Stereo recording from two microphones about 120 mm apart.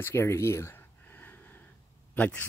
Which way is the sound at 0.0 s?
20° left (ahead or behind).